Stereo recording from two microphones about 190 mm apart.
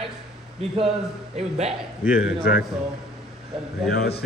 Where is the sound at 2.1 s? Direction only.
5° right (ahead or behind).